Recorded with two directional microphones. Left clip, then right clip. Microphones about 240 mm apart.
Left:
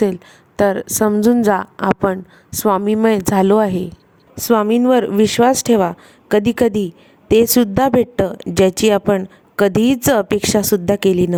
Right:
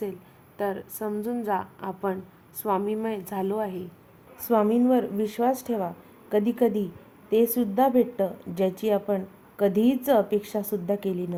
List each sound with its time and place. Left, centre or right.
0.0 s speech: left